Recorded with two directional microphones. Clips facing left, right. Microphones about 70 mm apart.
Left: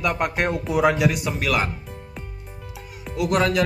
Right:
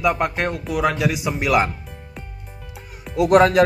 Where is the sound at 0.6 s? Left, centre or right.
Left.